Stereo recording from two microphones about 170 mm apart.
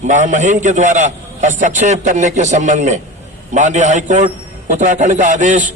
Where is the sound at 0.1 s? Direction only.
45° right (ahead or behind).